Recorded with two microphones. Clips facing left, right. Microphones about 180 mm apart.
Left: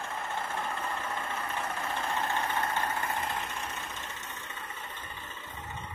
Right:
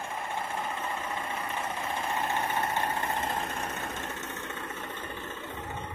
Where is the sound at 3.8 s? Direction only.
65° right (ahead or behind).